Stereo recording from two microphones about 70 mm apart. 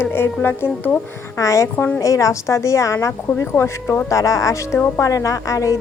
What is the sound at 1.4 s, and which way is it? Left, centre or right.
Speech, left.